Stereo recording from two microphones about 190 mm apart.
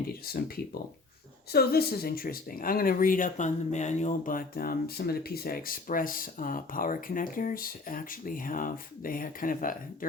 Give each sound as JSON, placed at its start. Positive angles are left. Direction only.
{"t": 0.3, "sound": "speech", "side_deg": 55}